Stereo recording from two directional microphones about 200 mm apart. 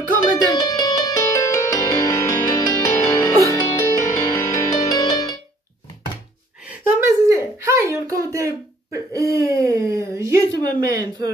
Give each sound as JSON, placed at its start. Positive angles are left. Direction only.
{"t": 0.4, "sound": "music", "side_deg": 20}
{"t": 6.6, "sound": "a sound", "side_deg": -15}
{"t": 8.1, "sound": "speech", "side_deg": -15}
{"t": 8.9, "sound": "hoot", "side_deg": -15}
{"t": 9.6, "sound": "a sound", "side_deg": -15}
{"t": 10.5, "sound": "speech", "side_deg": -20}